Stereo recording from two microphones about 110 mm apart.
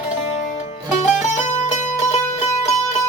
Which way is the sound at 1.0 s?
90° left.